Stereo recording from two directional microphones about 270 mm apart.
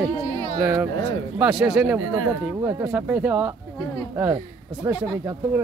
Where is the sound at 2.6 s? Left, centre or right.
Centre.